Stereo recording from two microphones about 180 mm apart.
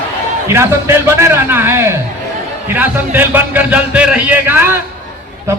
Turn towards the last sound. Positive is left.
turn(degrees=-10)  # may be behind; listen again after turning